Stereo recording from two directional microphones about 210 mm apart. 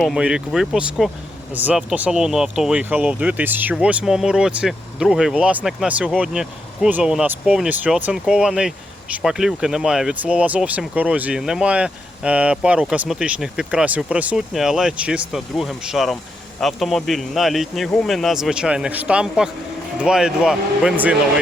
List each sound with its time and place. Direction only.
0.0 s speech: centre (ahead or behind)